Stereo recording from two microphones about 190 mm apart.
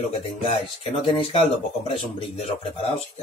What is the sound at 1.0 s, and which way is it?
Speech, 30° left (ahead or behind).